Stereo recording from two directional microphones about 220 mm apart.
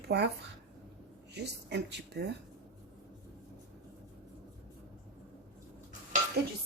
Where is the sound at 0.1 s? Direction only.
50° right (ahead or behind).